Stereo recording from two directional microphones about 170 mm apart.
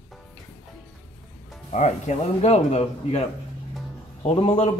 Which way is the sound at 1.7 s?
45° left (ahead or behind).